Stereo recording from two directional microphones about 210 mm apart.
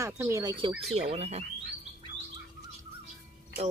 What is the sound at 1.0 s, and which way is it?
Speech, 30° right (ahead or behind).